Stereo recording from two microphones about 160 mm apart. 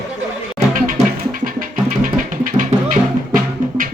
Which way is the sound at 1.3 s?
60° right (ahead or behind).